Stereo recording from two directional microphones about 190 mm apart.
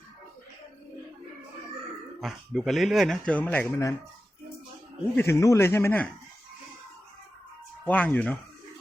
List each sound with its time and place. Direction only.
2.2 s speech: centre (ahead or behind)
5.1 s speech: 15° left (ahead or behind)
7.9 s speech: 10° left (ahead or behind)